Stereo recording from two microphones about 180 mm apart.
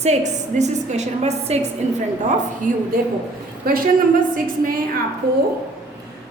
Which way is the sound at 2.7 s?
45° right (ahead or behind).